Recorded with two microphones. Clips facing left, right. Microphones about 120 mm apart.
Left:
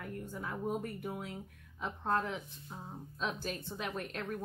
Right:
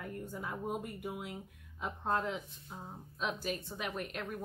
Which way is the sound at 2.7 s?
5° right (ahead or behind).